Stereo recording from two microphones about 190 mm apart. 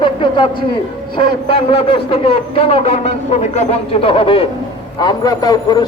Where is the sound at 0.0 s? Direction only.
25° left (ahead or behind).